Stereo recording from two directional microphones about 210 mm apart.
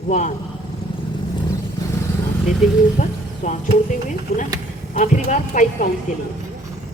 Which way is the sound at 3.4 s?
35° left (ahead or behind).